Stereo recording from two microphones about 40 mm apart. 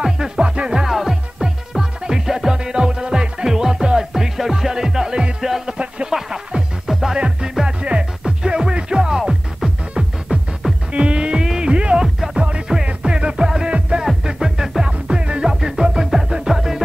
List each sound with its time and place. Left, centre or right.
0.4 s music: right
6.9 s music: centre
7.2 s music: right
8.2 s music: centre
10.3 s music: right
14.2 s music: centre
14.8 s music: right
15.4 s music: centre